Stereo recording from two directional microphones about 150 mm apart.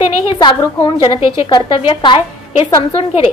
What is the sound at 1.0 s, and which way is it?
A woman's voice, 35° left (ahead or behind).